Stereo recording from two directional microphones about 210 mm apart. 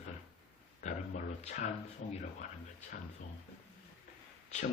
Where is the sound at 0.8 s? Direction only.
35° left (ahead or behind).